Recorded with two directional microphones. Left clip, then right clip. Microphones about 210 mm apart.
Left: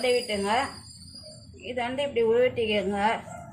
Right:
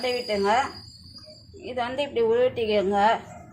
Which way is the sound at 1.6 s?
20° right (ahead or behind).